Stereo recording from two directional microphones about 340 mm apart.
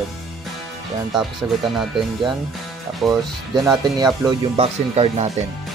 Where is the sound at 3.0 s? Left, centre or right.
Centre.